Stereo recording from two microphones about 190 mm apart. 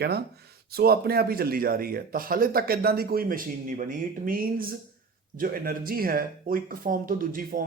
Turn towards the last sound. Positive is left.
turn(degrees=-45)  # may be behind; listen again after turning